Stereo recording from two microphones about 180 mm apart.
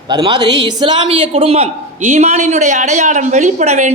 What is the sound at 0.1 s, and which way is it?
A man's voice, 25° right (ahead or behind).